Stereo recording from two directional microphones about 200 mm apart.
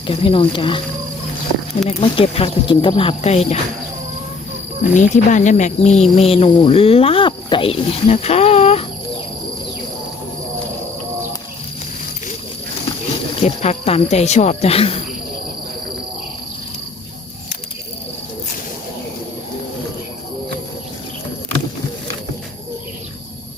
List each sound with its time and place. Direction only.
0.1 s speech: 25° left (ahead or behind)
1.9 s speech: 30° left (ahead or behind)
4.8 s speech: 40° left (ahead or behind)
13.4 s speech: 30° left (ahead or behind)